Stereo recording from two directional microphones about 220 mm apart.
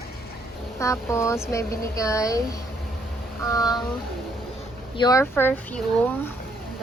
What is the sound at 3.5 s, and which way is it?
Speech, 15° left (ahead or behind).